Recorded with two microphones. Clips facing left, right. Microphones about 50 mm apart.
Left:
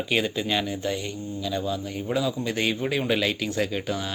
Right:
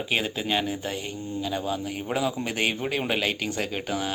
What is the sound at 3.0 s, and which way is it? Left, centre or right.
Speech, right.